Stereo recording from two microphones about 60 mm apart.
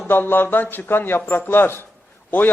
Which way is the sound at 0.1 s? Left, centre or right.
Left.